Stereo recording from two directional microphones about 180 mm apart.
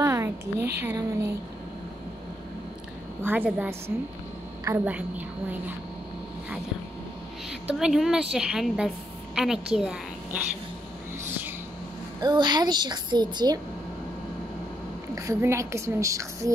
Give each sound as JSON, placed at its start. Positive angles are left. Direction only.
{"t": 0.0, "sound": "a sound", "side_deg": -15}
{"t": 0.7, "sound": "a woman's voice", "side_deg": -15}
{"t": 3.2, "sound": "a woman's voice", "side_deg": -10}
{"t": 7.6, "sound": "a woman's voice", "side_deg": 0}
{"t": 12.2, "sound": "a woman's voice", "side_deg": -25}
{"t": 15.1, "sound": "a woman's voice", "side_deg": -15}